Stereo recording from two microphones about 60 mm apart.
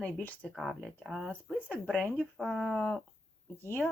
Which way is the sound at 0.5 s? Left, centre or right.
Centre.